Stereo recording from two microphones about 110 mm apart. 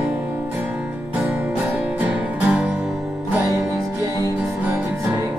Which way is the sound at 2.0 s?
10° right (ahead or behind).